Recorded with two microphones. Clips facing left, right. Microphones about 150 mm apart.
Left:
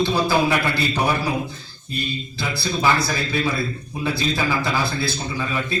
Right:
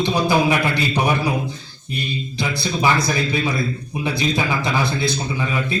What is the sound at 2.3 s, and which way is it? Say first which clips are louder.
A man's voice: right 2 dB; 15° right (ahead or behind).